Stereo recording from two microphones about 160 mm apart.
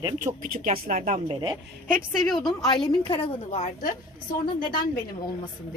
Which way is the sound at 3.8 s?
60° left (ahead or behind).